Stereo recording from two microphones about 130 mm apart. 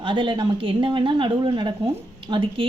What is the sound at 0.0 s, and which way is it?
A woman's voice, 40° right (ahead or behind).